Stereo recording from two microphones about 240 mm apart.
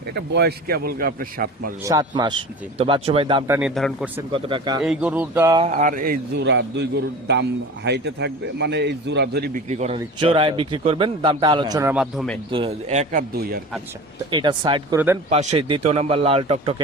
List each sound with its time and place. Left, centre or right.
0.2 s a man's voice: right
1.8 s a man's voice: centre
3.4 s speech: centre
3.8 s speech: centre
4.3 s a man's voice: right
4.8 s speech: centre
5.6 s a man's voice: right
9.6 s a man's voice: right; by 12.4 s centre
12.5 s a man's voice: right
14.3 s a man's voice: centre
15.3 s a man's voice: right